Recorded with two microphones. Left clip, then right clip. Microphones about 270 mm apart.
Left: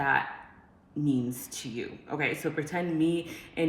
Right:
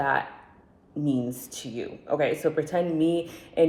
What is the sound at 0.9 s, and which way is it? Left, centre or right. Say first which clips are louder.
Speech: right 2 dB; centre.